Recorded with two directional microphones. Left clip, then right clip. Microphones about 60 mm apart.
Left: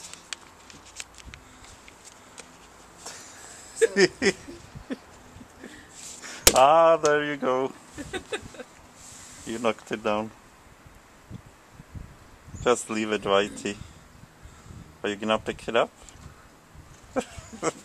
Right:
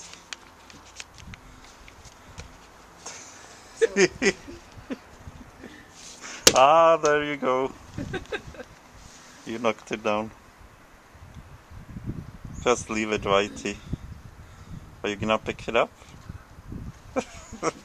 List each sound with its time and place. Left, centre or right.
0.0 s patter: centre
3.9 s speech: centre
4.9 s a sound: right
5.9 s chop: centre
7.1 s speech: centre
8.1 s a sound: left
9.5 s speech: centre
12.6 s speech: centre
15.0 s speech: centre
17.1 s a sound: right